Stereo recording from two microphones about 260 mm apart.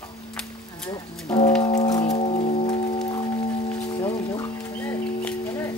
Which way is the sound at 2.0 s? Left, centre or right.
Left.